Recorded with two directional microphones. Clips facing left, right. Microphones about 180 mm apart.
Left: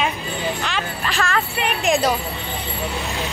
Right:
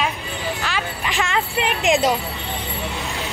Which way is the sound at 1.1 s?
20° right (ahead or behind).